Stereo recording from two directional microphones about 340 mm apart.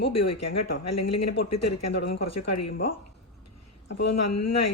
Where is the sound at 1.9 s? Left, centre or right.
Left.